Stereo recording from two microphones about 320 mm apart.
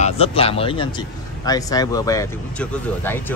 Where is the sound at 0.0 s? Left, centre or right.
Centre.